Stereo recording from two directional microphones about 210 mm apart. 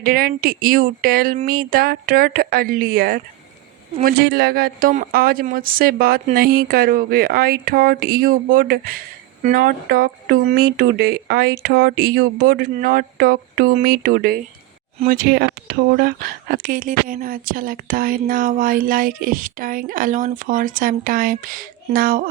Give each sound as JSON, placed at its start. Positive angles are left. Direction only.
{"t": 0.0, "sound": "speech", "side_deg": -45}
{"t": 4.2, "sound": "speech", "side_deg": -50}